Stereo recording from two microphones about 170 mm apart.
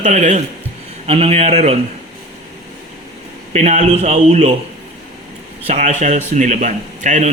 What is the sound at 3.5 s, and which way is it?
Speech, 40° right (ahead or behind).